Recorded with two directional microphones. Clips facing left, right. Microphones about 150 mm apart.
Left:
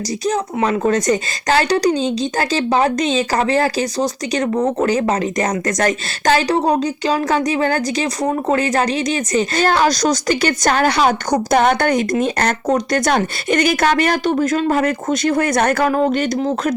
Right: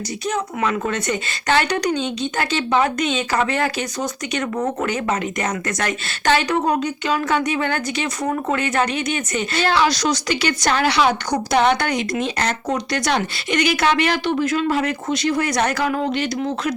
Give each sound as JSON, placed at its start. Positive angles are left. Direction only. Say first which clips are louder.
{"t": 0.3, "sound": "a woman's voice", "louder": "left 4 dB", "side_deg": 35}